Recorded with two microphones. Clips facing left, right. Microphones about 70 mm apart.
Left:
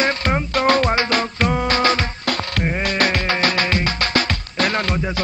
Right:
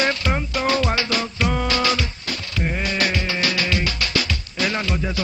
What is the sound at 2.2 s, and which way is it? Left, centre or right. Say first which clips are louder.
Music: left 5 dB; left.